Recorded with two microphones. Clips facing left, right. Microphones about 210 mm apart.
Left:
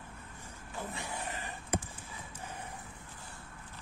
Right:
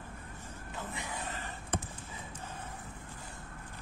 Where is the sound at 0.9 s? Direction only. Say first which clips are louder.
Even; 15° right (ahead or behind).